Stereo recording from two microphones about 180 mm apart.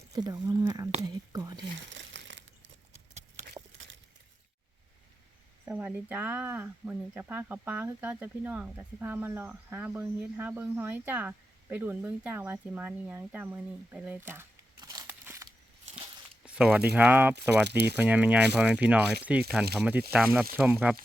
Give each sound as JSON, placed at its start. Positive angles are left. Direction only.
{"t": 0.1, "sound": "speech", "side_deg": -20}
{"t": 1.9, "sound": "a sound", "side_deg": -90}
{"t": 3.4, "sound": "a sound", "side_deg": -85}
{"t": 5.6, "sound": "speech", "side_deg": -10}
{"t": 14.8, "sound": "scissors", "side_deg": -25}
{"t": 15.0, "sound": "a sound", "side_deg": -10}
{"t": 16.6, "sound": "speech", "side_deg": -5}
{"t": 17.7, "sound": "speech", "side_deg": -65}
{"t": 17.9, "sound": "speech", "side_deg": -10}